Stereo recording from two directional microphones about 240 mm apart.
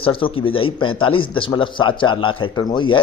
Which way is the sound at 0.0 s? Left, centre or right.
Left.